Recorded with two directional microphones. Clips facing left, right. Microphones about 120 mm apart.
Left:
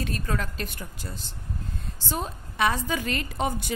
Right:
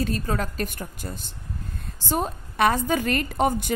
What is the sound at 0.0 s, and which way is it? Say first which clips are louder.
A woman's voice: right 4 dB; 35° right (ahead or behind).